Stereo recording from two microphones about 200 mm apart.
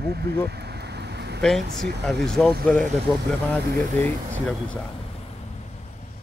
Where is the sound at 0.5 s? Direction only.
55° right (ahead or behind).